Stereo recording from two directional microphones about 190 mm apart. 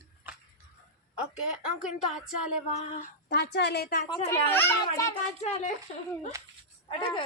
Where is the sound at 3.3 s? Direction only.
60° left (ahead or behind).